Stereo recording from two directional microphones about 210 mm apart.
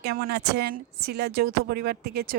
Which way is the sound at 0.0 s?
50° right (ahead or behind).